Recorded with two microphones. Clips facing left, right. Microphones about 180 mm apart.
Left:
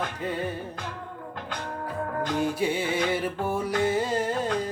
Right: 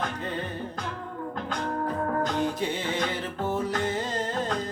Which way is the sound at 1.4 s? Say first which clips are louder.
Right 5 dB; 45° right (ahead or behind).